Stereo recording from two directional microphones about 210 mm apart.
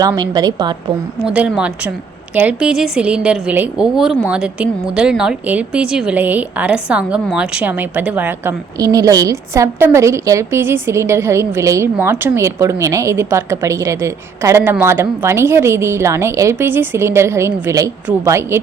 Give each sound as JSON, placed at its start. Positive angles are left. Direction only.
{"t": 0.0, "sound": "a woman's voice", "side_deg": -20}
{"t": 1.2, "sound": "a woman's voice", "side_deg": -5}